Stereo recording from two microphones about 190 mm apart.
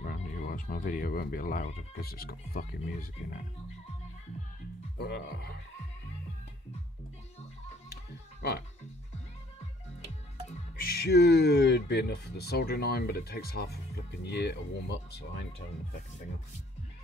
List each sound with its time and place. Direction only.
0.0 s speech: 45° left (ahead or behind)
4.9 s speech: 60° left (ahead or behind)
7.9 s music: 55° left (ahead or behind)
10.8 s speech: 55° left (ahead or behind)